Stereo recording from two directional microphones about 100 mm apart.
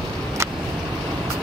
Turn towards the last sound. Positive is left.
turn(degrees=-30)  # may be behind; listen again after turning